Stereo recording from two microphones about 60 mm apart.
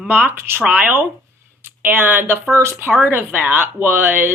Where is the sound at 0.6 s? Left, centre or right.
Right.